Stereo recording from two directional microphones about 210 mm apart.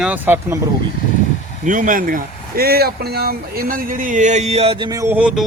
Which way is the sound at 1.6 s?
40° right (ahead or behind).